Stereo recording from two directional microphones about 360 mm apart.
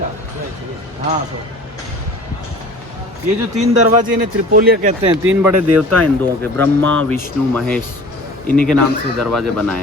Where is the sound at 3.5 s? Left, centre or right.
Centre.